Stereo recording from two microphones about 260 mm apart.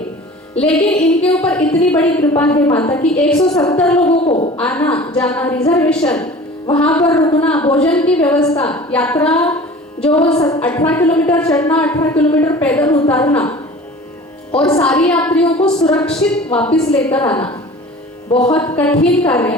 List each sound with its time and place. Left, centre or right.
0.6 s a woman's voice: centre
3.5 s a woman's voice: centre
3.8 s a woman's voice: centre
4.0 s speech: left
4.5 s a woman's voice: centre
14.8 s a woman's voice: centre
18.3 s music: centre
18.5 s a woman's voice: centre